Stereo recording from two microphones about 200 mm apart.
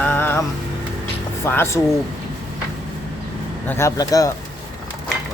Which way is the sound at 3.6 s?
15° left (ahead or behind).